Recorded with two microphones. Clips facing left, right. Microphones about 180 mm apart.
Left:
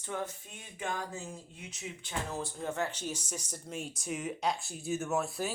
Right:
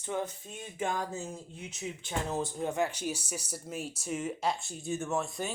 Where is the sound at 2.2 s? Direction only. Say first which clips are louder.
Right 5 dB; 20° right (ahead or behind).